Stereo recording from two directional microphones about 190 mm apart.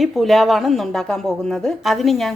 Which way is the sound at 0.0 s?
Centre (ahead or behind).